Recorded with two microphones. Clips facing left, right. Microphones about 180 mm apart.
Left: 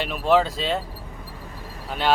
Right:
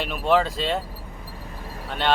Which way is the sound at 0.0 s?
Centre (ahead or behind).